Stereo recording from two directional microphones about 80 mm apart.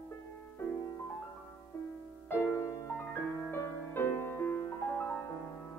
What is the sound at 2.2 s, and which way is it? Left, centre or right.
Music, left.